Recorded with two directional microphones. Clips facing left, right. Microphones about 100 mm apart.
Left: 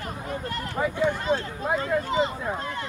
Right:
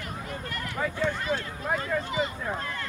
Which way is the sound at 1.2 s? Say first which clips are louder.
Left 4 dB; 25° left (ahead or behind).